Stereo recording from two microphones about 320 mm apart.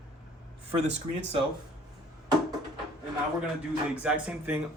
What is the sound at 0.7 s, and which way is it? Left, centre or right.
Speech, centre.